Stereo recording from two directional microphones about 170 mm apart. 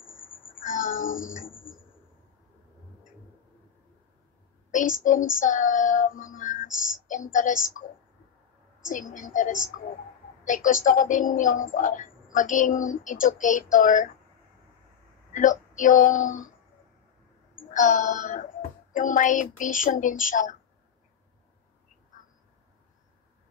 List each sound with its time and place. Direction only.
0.6 s a sound: 50° left (ahead or behind)
4.6 s child singing: 50° left (ahead or behind)
7.3 s a woman's voice: 50° left (ahead or behind)
8.8 s a woman's voice: 50° left (ahead or behind)
15.3 s speech: 50° left (ahead or behind)
17.6 s a woman's voice: 50° left (ahead or behind)